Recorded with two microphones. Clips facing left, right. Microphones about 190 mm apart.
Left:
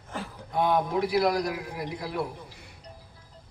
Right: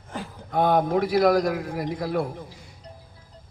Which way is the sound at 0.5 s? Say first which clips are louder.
Right 4 dB; 50° right (ahead or behind).